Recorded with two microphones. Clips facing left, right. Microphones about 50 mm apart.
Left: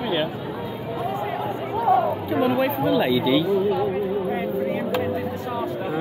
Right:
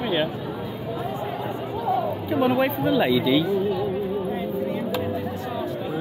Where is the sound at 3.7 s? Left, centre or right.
Left.